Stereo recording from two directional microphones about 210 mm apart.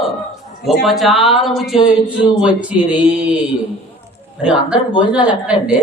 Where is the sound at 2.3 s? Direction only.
5° right (ahead or behind).